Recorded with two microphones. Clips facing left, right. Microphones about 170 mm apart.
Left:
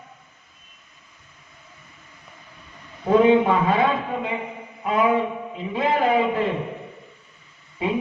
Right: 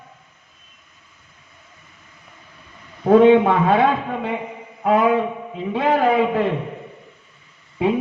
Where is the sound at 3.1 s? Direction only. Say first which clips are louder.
Right 4 dB; 60° right (ahead or behind).